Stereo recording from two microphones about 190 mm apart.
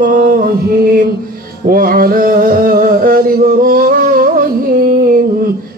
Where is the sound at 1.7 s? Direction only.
50° right (ahead or behind).